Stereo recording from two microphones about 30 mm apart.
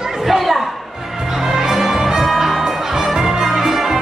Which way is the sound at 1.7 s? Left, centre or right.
Centre.